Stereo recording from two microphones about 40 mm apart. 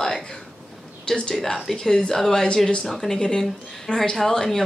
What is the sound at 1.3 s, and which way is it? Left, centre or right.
Speech, centre.